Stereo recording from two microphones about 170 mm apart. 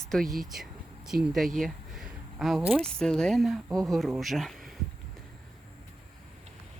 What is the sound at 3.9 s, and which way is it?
Speech, centre (ahead or behind).